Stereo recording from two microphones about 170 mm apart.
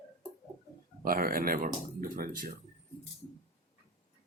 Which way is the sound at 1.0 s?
55° right (ahead or behind).